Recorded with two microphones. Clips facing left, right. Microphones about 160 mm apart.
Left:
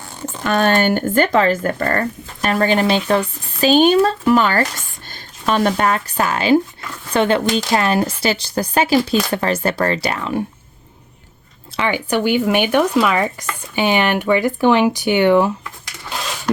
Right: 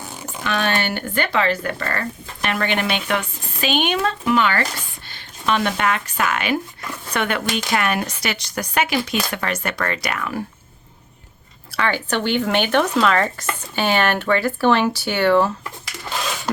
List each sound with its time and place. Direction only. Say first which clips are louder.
0.4 s speech: left 7 dB; 45° left (ahead or behind); by 10.4 s 25° left (ahead or behind)
11.8 s speech: left 3 dB; 15° left (ahead or behind)